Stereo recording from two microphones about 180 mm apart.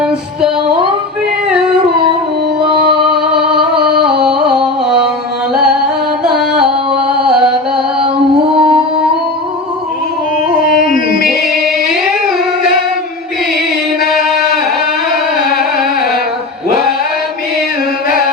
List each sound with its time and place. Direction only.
3.1 s music: 5° right (ahead or behind)
6.2 s music: 5° right (ahead or behind)
8.5 s music: 30° right (ahead or behind)
10.8 s music: 50° left (ahead or behind)